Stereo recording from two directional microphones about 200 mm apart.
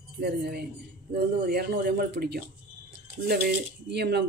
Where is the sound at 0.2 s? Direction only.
55° right (ahead or behind).